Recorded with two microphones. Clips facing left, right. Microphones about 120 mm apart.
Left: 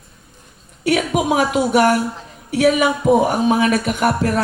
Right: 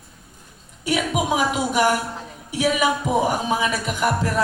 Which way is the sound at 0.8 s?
65° left (ahead or behind).